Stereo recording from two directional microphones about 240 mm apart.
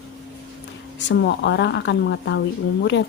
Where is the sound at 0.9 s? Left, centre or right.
Left.